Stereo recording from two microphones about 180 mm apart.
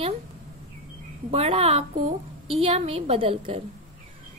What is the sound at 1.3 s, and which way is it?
A woman's voice, 35° right (ahead or behind).